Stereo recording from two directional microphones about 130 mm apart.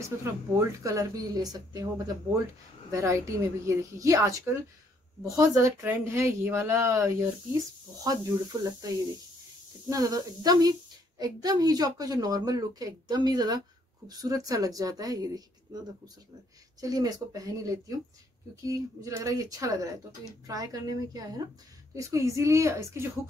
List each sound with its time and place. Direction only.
0.2 s speech: 25° right (ahead or behind)
2.9 s speech: 20° right (ahead or behind)
5.4 s speech: 20° right (ahead or behind)
16.8 s speech: 30° right (ahead or behind)